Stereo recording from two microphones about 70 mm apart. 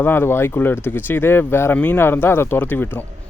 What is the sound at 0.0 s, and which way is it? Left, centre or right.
Speech, left.